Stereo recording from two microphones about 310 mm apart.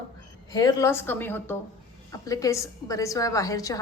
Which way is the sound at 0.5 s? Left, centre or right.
Centre.